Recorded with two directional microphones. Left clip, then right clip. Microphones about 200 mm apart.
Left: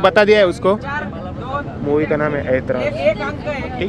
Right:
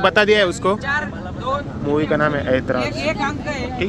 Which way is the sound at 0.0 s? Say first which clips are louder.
Left 3 dB; 10° left (ahead or behind).